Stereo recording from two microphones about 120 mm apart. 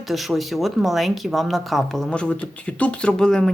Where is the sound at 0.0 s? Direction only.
Centre (ahead or behind).